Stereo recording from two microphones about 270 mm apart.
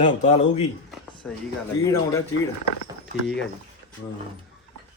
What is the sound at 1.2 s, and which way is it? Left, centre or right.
Speech, centre.